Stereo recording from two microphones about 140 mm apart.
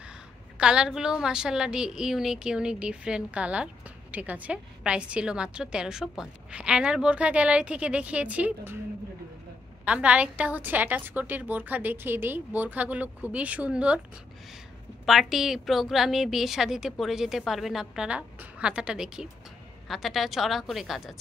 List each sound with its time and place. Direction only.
0.6 s a woman's voice: 5° right (ahead or behind)
9.8 s a woman's voice: 10° right (ahead or behind)
15.0 s a woman's voice: centre (ahead or behind)